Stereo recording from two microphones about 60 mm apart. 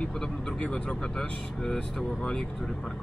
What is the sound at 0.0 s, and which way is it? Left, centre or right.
Speech, centre.